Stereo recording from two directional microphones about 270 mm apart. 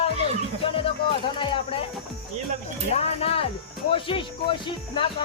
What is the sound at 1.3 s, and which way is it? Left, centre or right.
Music, centre.